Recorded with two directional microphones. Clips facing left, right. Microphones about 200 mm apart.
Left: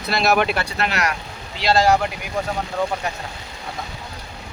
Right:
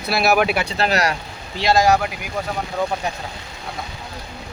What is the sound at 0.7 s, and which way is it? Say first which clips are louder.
Speech: right 3 dB; 35° right (ahead or behind).